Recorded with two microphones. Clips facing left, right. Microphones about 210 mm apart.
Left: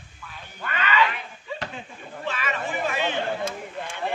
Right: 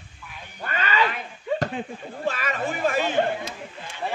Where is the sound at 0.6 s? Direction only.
40° right (ahead or behind).